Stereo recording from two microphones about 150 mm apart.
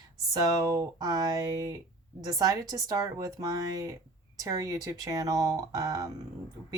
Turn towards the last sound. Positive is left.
turn(degrees=-25)  # may be behind; listen again after turning